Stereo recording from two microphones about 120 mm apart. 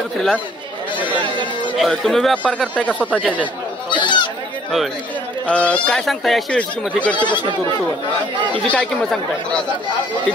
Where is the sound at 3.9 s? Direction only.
40° left (ahead or behind).